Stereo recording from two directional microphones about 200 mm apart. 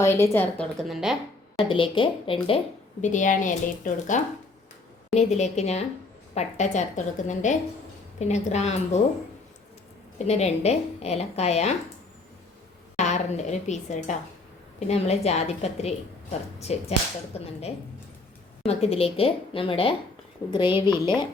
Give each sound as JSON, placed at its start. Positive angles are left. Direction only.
{"t": 0.0, "sound": "a woman's voice", "side_deg": 15}
{"t": 1.5, "sound": "a woman's voice", "side_deg": 25}
{"t": 3.0, "sound": "a woman's voice", "side_deg": 40}
{"t": 10.2, "sound": "a woman's voice", "side_deg": 35}
{"t": 13.0, "sound": "a woman's voice", "side_deg": 35}
{"t": 18.6, "sound": "a woman's voice", "side_deg": 30}